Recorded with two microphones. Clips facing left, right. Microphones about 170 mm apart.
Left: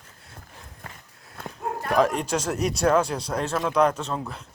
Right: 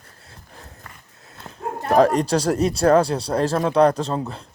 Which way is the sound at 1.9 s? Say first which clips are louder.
Right 6 dB; 40° right (ahead or behind).